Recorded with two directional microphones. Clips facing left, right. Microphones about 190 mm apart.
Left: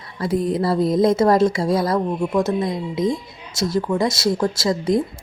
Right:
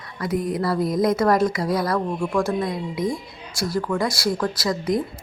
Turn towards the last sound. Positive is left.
turn(degrees=25)  # may be behind; listen again after turning